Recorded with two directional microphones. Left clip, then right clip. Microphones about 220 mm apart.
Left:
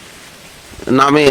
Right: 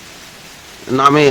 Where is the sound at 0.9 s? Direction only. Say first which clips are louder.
Even; 45° left (ahead or behind).